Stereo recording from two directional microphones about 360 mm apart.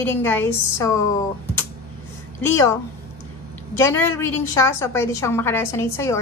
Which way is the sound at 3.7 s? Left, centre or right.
Centre.